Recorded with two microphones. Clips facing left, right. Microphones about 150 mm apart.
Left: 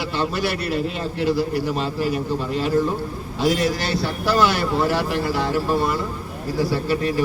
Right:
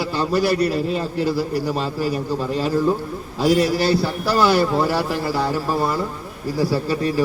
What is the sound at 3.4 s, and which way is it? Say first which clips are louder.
A man's voice: right 3 dB; 35° right (ahead or behind).